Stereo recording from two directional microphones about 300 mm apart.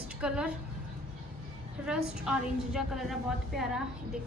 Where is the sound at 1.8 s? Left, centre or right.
Centre.